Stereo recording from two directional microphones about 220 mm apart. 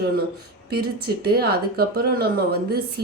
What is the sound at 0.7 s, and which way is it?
A woman's voice, 45° right (ahead or behind).